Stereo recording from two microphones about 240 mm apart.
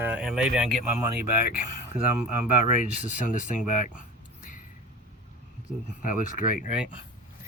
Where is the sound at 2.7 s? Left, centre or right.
Left.